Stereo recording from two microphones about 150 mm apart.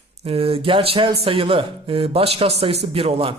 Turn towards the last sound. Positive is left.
turn(degrees=-40)  # may be behind; listen again after turning